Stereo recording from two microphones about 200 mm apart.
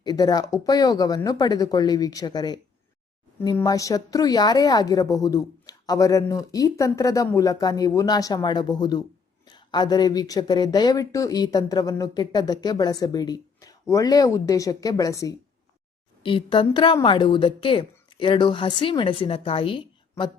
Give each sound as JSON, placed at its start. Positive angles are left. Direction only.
{"t": 0.0, "sound": "a woman's voice", "side_deg": 20}